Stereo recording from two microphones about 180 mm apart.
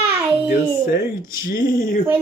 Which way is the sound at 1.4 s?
55° left (ahead or behind).